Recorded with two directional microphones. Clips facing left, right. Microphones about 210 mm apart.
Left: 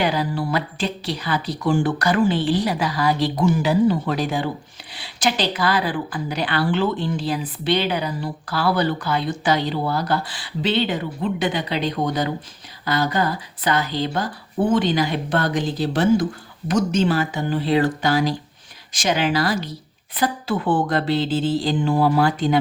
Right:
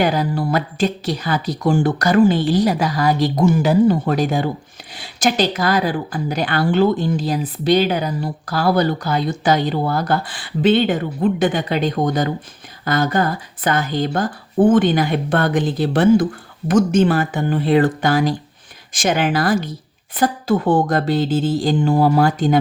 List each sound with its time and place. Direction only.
0.0 s a woman's voice: 45° right (ahead or behind)